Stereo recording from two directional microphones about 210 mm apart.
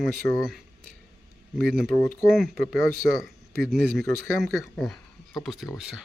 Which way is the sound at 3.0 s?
50° right (ahead or behind).